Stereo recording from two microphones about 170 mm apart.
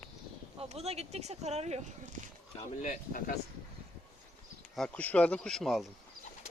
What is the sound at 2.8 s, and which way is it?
Speech, 50° left (ahead or behind).